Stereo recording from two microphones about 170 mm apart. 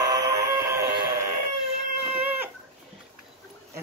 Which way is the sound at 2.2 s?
10° right (ahead or behind).